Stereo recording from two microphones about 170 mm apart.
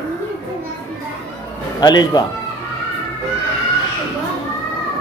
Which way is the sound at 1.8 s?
25° left (ahead or behind).